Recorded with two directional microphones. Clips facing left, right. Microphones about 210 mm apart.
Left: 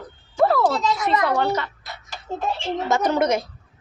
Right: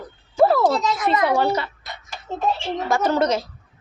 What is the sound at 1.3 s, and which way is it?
Speech, 10° right (ahead or behind).